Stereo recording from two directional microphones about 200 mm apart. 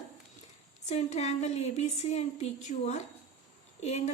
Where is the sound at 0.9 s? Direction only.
35° left (ahead or behind).